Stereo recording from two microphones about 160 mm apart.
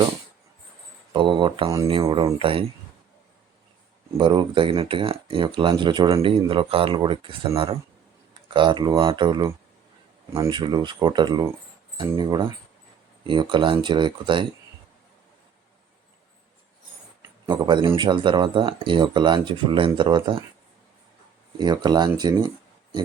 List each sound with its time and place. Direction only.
1.1 s speech: 30° right (ahead or behind)
4.2 s speech: 30° right (ahead or behind)
10.5 s speech: 30° right (ahead or behind)
17.4 s speech: 30° right (ahead or behind)
21.6 s speech: 25° right (ahead or behind)